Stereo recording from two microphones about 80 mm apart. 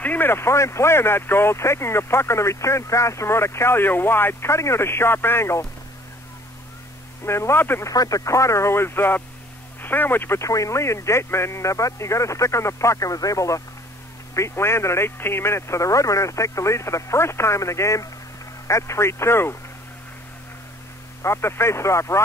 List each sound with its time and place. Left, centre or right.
0.0 s speech: left
7.2 s speech: left
7.8 s speech: left
10.4 s speech: left
21.2 s speech: left